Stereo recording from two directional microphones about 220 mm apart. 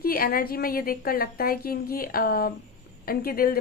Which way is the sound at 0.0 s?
40° left (ahead or behind).